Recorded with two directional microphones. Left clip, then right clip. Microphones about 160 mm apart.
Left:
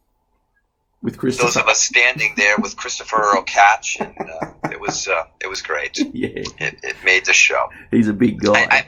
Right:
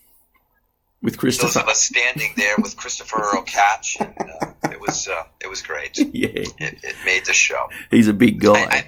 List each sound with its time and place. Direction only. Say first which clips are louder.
1.0 s speech: right 1 dB; 10° right (ahead or behind)
1.4 s speech: left 4 dB; 30° left (ahead or behind)
6.1 s speech: right 2 dB; 10° right (ahead or behind)
6.4 s speech: left 3 dB; 35° left (ahead or behind)
7.7 s speech: right 2 dB; 15° right (ahead or behind)
8.5 s speech: left 3 dB; 35° left (ahead or behind)